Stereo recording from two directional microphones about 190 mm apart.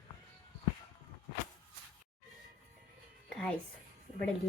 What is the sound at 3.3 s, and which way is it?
Music, 5° left (ahead or behind).